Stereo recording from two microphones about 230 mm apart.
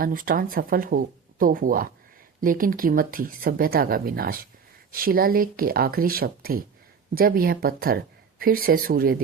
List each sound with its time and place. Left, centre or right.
0.0 s speech: right